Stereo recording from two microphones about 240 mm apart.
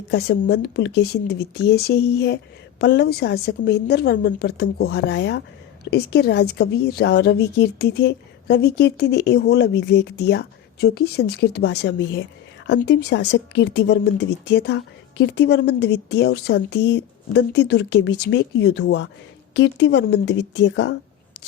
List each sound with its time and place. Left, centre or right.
0.1 s a woman's voice: left